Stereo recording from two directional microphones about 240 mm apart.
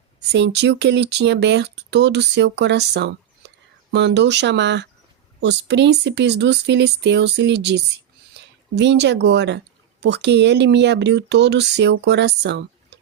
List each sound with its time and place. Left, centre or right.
0.2 s speech: right